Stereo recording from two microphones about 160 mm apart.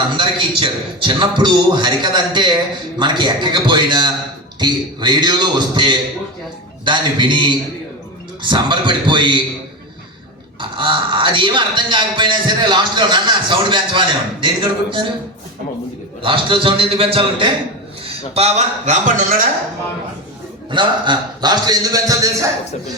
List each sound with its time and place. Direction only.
0.2 s a man's voice: 30° right (ahead or behind)
10.6 s speech: 30° right (ahead or behind)
16.2 s a man's voice: 30° right (ahead or behind); by 19.4 s 50° right (ahead or behind)
20.7 s a man's voice: 30° right (ahead or behind)